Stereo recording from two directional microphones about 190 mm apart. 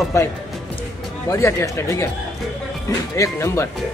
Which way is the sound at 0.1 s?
15° left (ahead or behind).